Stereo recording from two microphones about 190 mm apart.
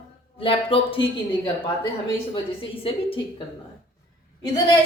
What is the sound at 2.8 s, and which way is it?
Speech, 30° left (ahead or behind).